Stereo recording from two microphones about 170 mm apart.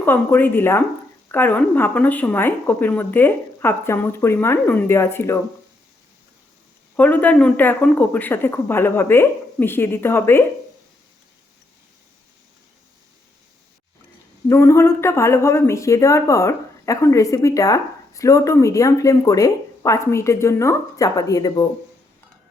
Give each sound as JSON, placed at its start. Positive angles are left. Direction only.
{"t": 0.0, "sound": "speech", "side_deg": 10}
{"t": 6.9, "sound": "speech", "side_deg": 10}
{"t": 14.4, "sound": "speech", "side_deg": 15}